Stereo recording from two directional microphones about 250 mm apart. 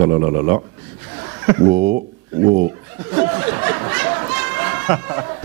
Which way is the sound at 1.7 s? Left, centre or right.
Right.